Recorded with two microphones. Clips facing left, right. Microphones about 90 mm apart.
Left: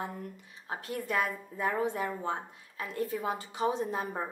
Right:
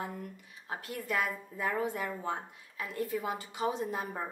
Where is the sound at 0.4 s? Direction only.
30° left (ahead or behind).